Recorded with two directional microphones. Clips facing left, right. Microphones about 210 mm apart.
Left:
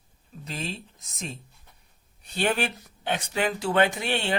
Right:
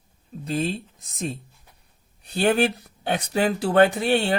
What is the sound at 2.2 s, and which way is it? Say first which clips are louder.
Speech: right 6 dB; 35° right (ahead or behind).